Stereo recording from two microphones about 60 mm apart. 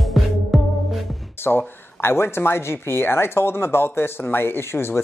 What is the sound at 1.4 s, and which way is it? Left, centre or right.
Speech, left.